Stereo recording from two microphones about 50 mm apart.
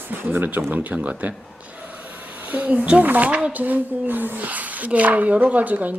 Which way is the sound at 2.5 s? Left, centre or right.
Right.